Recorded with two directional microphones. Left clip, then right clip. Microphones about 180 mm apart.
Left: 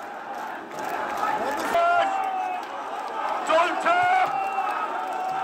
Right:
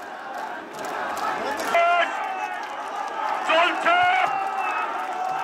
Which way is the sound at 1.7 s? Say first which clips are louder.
Right 1 dB; 65° left (ahead or behind).